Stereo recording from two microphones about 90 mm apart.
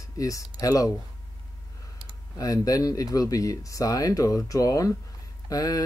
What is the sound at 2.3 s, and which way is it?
Speech, 40° left (ahead or behind).